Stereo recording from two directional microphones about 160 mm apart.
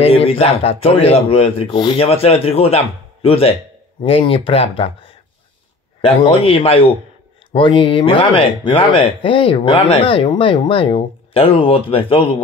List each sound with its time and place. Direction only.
0.0 s speech: 40° left (ahead or behind)
5.9 s speech: 35° left (ahead or behind)